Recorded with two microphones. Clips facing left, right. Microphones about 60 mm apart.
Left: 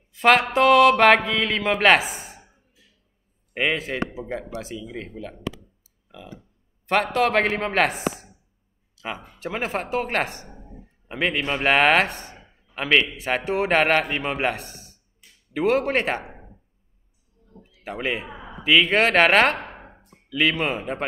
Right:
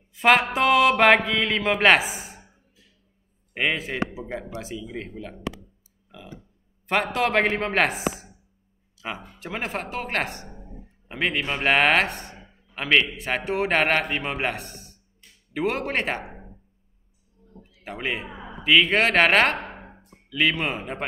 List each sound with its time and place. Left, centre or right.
0.1 s a man's voice: centre
3.5 s a man's voice: centre
6.9 s a man's voice: centre
8.9 s a sound: centre
9.2 s a man's voice: centre
17.6 s a man's voice: centre